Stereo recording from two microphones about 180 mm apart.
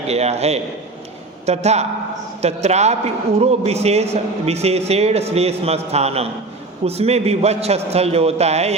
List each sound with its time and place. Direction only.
0.1 s a man's voice: 35° right (ahead or behind)